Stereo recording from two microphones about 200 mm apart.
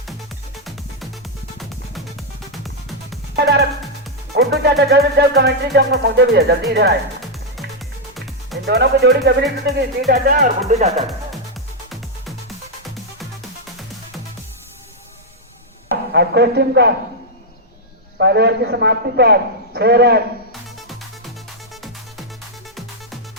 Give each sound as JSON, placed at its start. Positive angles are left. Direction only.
{"t": 1.5, "sound": "music", "side_deg": 0}
{"t": 3.3, "sound": "speech", "side_deg": -55}
{"t": 8.6, "sound": "speech", "side_deg": -55}
{"t": 10.1, "sound": "speech", "side_deg": -45}
{"t": 10.7, "sound": "speech", "side_deg": -35}
{"t": 11.9, "sound": "music", "side_deg": 0}
{"t": 16.1, "sound": "speech", "side_deg": -55}
{"t": 18.2, "sound": "speech", "side_deg": -55}